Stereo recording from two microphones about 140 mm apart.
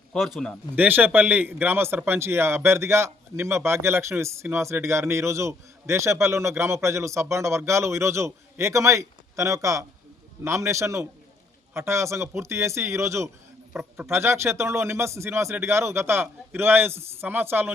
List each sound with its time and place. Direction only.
0.1 s a man's voice: centre (ahead or behind)
0.8 s a man's voice: 15° right (ahead or behind)